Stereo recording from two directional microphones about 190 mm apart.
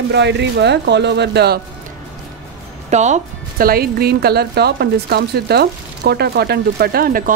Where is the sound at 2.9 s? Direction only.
40° right (ahead or behind).